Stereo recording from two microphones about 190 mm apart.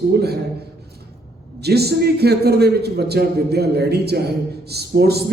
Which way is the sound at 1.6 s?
60° right (ahead or behind).